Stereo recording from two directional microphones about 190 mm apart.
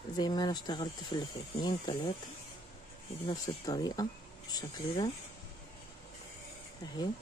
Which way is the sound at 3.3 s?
20° left (ahead or behind).